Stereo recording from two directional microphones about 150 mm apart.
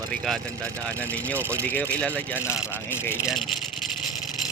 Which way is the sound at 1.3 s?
15° right (ahead or behind).